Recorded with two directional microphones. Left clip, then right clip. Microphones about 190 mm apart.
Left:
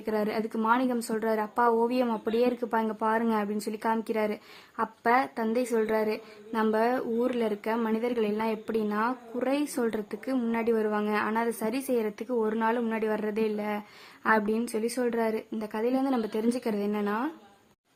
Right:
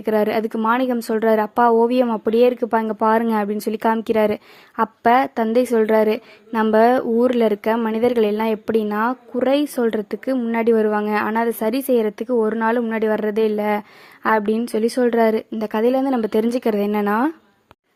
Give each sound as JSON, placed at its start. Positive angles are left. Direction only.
{"t": 0.0, "sound": "speech", "side_deg": -30}